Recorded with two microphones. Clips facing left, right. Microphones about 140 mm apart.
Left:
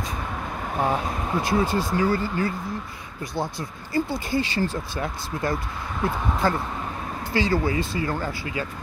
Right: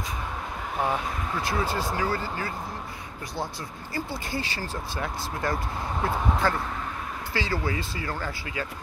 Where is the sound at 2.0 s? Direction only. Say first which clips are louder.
Left 6 dB; 35° right (ahead or behind).